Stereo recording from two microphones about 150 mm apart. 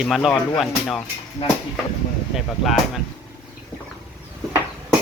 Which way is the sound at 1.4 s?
45° left (ahead or behind).